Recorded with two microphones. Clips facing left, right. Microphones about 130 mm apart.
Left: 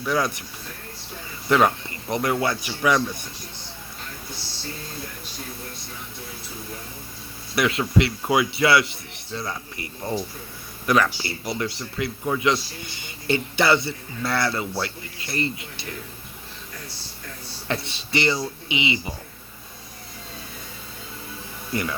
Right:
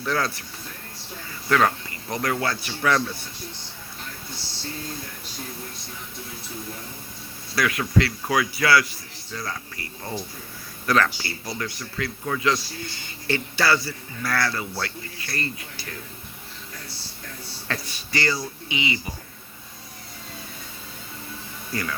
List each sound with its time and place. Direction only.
0.0 s speech: 15° left (ahead or behind)
1.5 s a man's voice: 20° left (ahead or behind)
7.5 s a man's voice: 25° left (ahead or behind)
17.7 s a man's voice: 25° left (ahead or behind)
21.7 s speech: 20° left (ahead or behind)